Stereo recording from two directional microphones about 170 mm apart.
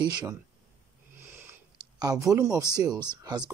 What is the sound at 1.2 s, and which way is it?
Sniff, 15° right (ahead or behind).